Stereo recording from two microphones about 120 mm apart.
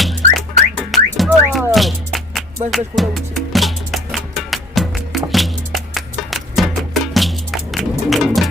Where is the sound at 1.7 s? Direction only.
Centre (ahead or behind).